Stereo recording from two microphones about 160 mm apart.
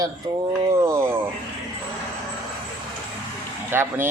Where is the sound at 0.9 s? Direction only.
15° right (ahead or behind).